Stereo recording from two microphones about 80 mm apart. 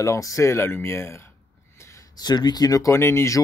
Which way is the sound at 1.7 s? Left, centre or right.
Left.